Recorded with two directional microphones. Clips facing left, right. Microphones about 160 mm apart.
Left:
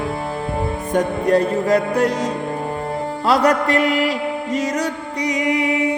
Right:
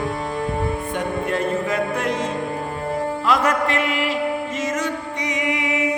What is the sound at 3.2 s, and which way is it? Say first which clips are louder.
Music: left 5 dB; 35° left (ahead or behind).